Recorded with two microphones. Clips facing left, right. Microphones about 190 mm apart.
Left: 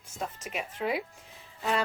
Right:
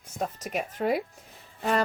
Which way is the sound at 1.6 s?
50° right (ahead or behind).